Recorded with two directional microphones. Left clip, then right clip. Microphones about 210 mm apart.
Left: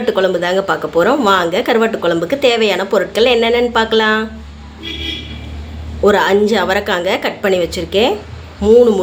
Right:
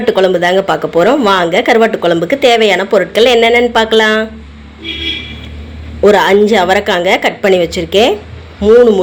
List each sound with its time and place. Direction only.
0.0 s speech: 15° right (ahead or behind)
6.0 s speech: 15° right (ahead or behind)